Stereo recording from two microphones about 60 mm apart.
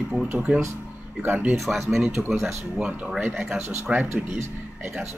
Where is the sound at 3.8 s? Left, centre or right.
Right.